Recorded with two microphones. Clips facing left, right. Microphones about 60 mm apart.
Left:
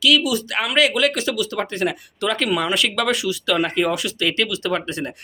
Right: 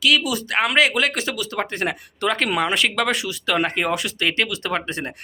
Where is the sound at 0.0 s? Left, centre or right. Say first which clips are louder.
Left 2 dB; right.